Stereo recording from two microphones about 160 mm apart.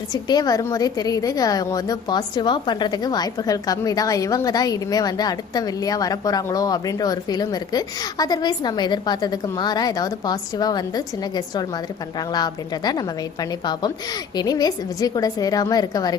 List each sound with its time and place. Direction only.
0.1 s a woman's voice: 25° left (ahead or behind)